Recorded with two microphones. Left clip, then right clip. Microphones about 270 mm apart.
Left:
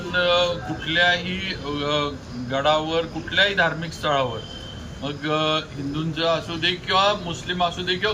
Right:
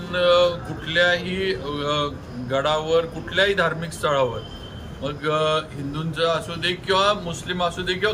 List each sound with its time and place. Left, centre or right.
0.1 s music: centre
2.5 s speech: centre